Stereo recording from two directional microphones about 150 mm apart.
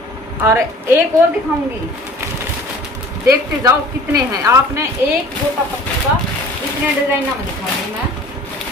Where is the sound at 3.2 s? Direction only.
20° right (ahead or behind).